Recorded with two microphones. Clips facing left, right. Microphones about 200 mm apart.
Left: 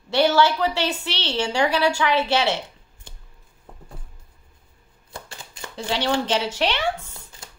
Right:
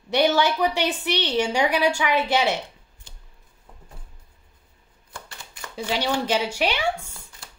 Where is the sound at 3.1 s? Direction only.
55° left (ahead or behind).